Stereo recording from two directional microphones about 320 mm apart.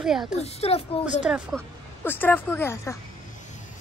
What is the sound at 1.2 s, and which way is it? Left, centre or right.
Speech, centre.